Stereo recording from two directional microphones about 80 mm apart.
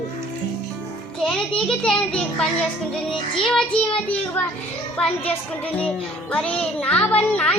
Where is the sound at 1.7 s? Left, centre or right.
Centre.